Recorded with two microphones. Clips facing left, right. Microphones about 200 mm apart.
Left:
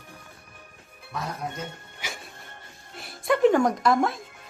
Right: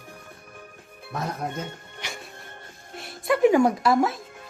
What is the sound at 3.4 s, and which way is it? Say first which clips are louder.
Speech: right 2 dB; 10° right (ahead or behind).